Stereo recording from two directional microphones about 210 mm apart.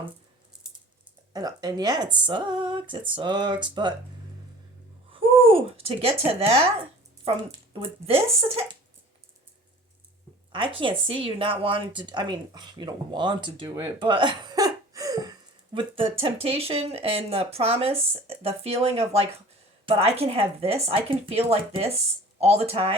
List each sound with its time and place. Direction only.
1.3 s speech: 20° right (ahead or behind)
5.1 s speech: 25° right (ahead or behind)
7.4 s speech: 25° right (ahead or behind)
10.5 s speech: 25° right (ahead or behind)
14.0 s hiccup: 25° right (ahead or behind)
15.7 s speech: 25° right (ahead or behind)